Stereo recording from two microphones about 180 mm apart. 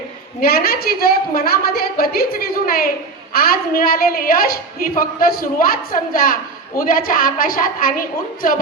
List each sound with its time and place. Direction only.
0.4 s a woman's voice: 60° left (ahead or behind)